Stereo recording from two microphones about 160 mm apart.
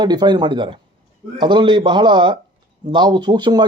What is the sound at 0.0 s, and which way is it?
Speech, 25° right (ahead or behind).